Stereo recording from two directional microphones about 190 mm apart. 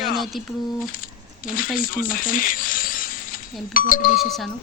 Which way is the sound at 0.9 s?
45° left (ahead or behind).